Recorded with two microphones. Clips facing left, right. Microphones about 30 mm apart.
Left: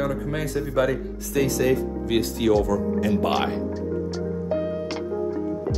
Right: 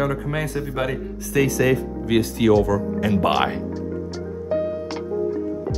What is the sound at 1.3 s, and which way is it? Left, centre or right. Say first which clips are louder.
Speech: right 2 dB; right.